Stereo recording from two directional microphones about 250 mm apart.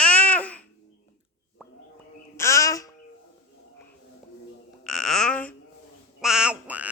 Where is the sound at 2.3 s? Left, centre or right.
Centre.